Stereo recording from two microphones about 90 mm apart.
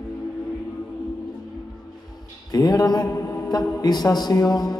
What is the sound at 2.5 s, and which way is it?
Mantra, 45° left (ahead or behind).